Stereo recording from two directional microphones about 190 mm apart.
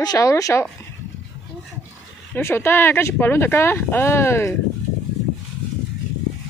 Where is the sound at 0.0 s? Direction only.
20° left (ahead or behind).